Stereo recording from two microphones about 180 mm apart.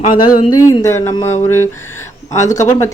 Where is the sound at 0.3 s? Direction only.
20° left (ahead or behind).